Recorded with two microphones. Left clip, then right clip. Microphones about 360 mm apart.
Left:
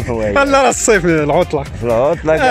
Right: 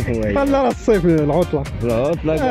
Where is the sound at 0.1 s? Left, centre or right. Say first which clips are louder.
Left 6 dB; left.